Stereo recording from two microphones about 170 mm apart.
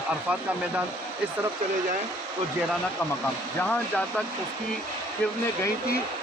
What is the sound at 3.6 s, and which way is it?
Speech, 5° left (ahead or behind).